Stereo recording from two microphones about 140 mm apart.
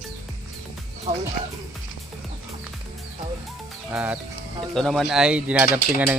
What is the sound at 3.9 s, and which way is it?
Speech, 10° right (ahead or behind).